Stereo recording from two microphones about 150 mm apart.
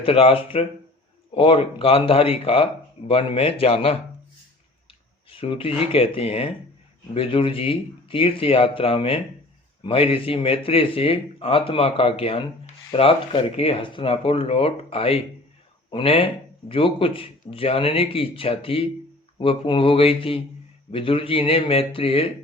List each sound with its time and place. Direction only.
0.0 s speech: 40° left (ahead or behind)
5.3 s speech: 35° left (ahead or behind)